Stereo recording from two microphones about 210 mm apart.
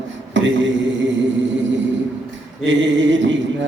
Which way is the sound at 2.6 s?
60° right (ahead or behind).